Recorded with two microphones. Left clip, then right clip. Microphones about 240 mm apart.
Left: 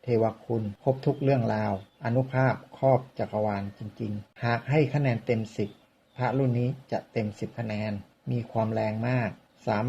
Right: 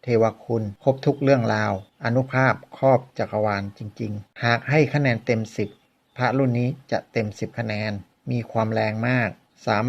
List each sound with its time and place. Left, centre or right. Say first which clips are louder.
0.0 s speech: right 6 dB; right